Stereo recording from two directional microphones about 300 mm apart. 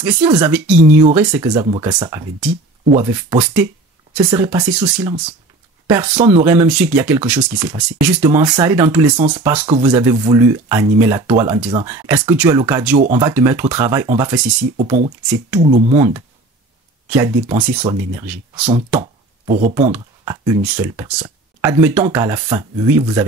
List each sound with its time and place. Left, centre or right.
0.0 s speech: centre
12.9 s speech: right
13.2 s speech: centre
15.6 s speech: centre
17.5 s speech: centre
18.7 s a sound: centre
19.9 s speech: centre